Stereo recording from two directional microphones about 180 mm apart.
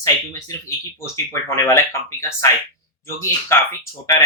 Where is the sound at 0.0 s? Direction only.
15° left (ahead or behind).